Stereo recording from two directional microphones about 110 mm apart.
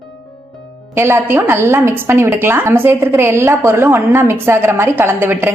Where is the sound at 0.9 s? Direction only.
20° right (ahead or behind).